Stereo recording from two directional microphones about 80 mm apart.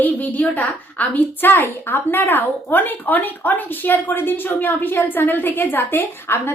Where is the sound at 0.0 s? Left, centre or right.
Left.